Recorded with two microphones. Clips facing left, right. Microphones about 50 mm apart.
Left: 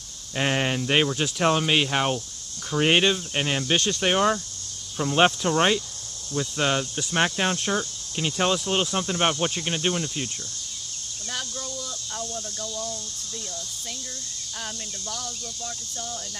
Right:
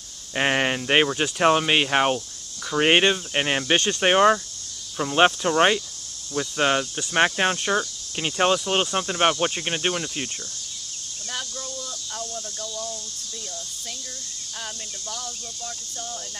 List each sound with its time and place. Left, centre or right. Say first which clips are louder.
0.3 s speech: right 3 dB; right
4.9 s speech: right 1 dB; centre
15.0 s speech: even; centre